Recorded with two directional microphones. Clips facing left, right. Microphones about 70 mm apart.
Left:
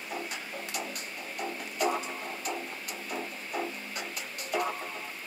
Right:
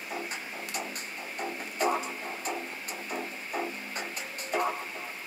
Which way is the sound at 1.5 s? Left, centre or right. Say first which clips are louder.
Right 1 dB; right.